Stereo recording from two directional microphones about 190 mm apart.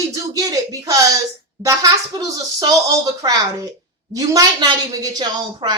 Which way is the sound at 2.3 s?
20° right (ahead or behind).